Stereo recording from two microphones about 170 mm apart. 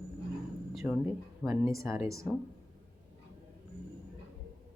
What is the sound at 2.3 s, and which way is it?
Speech, centre (ahead or behind).